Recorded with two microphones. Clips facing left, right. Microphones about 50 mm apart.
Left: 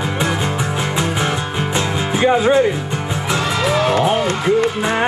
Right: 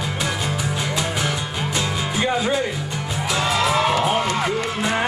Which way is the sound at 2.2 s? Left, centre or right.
Left.